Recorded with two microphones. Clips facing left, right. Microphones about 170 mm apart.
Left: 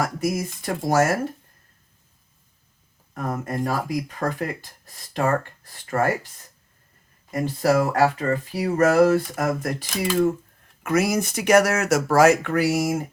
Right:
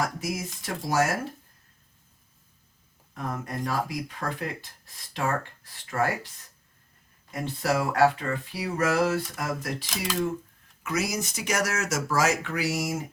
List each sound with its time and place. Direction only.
0.3 s speech: 50° left (ahead or behind)
3.2 s speech: 45° left (ahead or behind)
7.3 s speech: 45° left (ahead or behind)